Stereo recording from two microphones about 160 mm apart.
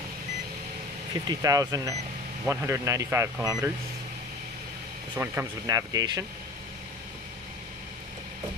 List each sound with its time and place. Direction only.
1.2 s speech: 25° right (ahead or behind)
5.1 s speech: 15° right (ahead or behind)